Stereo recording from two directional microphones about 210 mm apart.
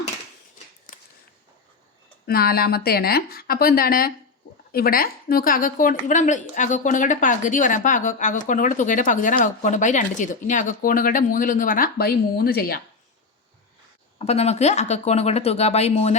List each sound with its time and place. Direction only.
2.2 s a woman's voice: 45° left (ahead or behind)
14.2 s a woman's voice: 30° left (ahead or behind)